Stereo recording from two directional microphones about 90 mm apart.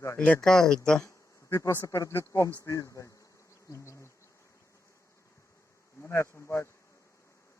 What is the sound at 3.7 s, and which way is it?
Bee, 35° left (ahead or behind).